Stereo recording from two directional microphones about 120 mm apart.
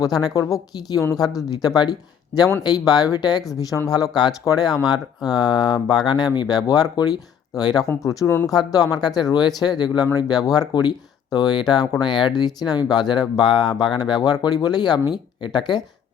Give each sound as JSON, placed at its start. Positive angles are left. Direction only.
{"t": 0.0, "sound": "a woman's voice", "side_deg": 35}